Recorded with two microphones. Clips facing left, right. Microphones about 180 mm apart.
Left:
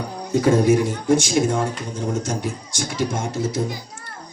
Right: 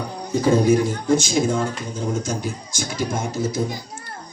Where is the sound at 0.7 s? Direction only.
75° left (ahead or behind).